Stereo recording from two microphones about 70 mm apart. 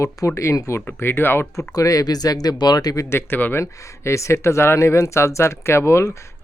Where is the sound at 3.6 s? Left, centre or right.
Left.